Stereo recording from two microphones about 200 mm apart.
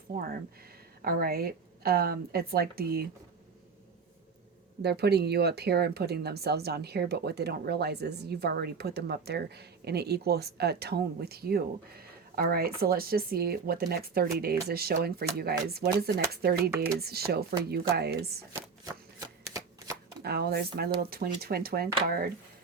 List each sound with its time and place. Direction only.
1.0 s speech: 50° right (ahead or behind)
4.8 s speech: 55° right (ahead or behind)
18.5 s shuffling cards: 15° right (ahead or behind)
20.2 s speech: 50° right (ahead or behind)